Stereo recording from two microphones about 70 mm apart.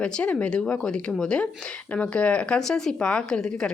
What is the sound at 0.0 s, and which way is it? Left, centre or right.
A woman's voice, centre.